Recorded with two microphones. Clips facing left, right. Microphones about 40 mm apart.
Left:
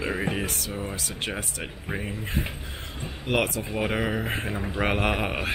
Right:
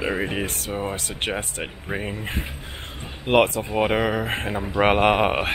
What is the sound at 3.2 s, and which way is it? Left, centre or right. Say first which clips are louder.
Speech: right 7 dB; right.